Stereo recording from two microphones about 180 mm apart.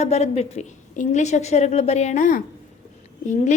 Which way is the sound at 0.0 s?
35° left (ahead or behind).